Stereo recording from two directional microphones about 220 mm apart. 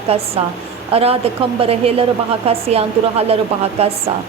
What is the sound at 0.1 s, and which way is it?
Speech, 25° right (ahead or behind).